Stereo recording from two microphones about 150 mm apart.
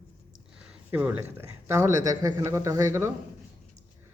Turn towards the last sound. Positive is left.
turn(degrees=-20)  # may be behind; listen again after turning